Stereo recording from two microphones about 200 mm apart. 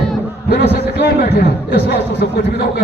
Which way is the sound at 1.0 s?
55° left (ahead or behind).